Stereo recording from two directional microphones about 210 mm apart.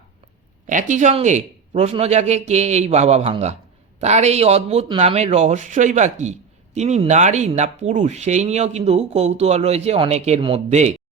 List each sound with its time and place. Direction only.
0.7 s speech: 35° right (ahead or behind)